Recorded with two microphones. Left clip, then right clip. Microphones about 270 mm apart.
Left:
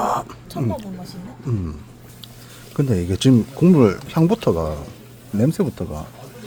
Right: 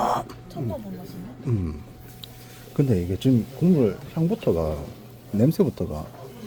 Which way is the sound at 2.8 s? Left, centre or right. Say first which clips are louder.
Left 2 dB; centre.